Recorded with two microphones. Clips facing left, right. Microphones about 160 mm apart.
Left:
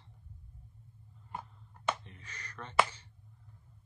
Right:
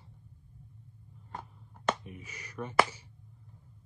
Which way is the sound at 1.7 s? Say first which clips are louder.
Right 4 dB; 10° right (ahead or behind).